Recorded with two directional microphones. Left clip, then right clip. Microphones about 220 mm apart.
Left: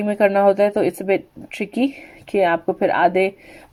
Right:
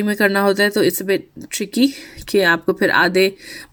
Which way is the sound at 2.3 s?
30° right (ahead or behind).